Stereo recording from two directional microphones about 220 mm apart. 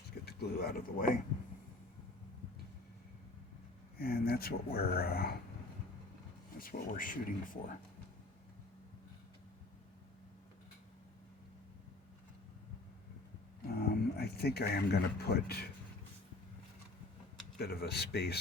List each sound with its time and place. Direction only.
0.3 s speech: 45° left (ahead or behind)
3.9 s speech: 45° left (ahead or behind)
6.6 s speech: 40° left (ahead or behind)
13.7 s speech: 45° left (ahead or behind)
17.6 s speech: 45° left (ahead or behind)